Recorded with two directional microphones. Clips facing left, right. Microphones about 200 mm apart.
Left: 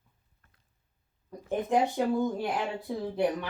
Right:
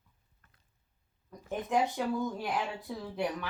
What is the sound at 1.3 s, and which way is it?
Speech, 30° left (ahead or behind).